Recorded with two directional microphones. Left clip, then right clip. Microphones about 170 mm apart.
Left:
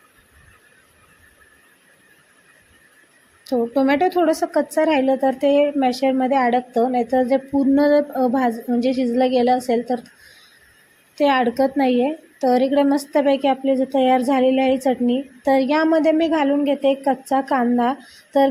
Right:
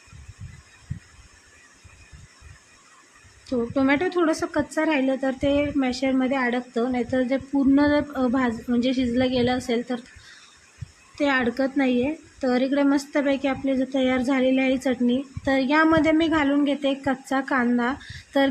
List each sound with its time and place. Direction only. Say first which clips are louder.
3.5 s a woman's voice: left 4 dB; 20° left (ahead or behind)
11.1 s a woman's voice: left 5 dB; 20° left (ahead or behind)